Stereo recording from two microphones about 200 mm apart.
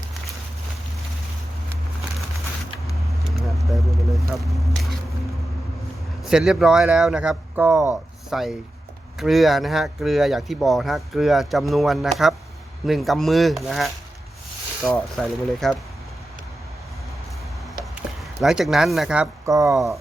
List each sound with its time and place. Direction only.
3.4 s a sound: centre (ahead or behind)
6.2 s speech: 5° right (ahead or behind)
14.9 s speech: centre (ahead or behind)
18.2 s speech: centre (ahead or behind)
19.5 s speech: 15° right (ahead or behind)
19.7 s speech: centre (ahead or behind)